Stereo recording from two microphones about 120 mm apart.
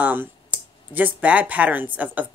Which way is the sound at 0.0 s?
15° right (ahead or behind).